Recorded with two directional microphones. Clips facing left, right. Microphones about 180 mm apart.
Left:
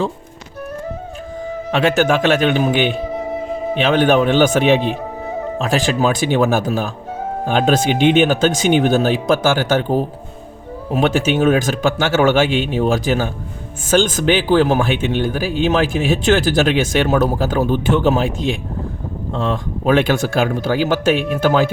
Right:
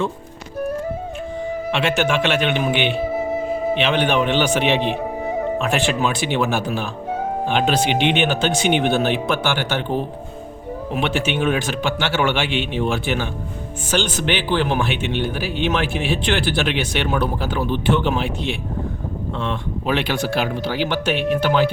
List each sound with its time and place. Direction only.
1.7 s speech: 40° left (ahead or behind)
19.3 s speech: 40° left (ahead or behind)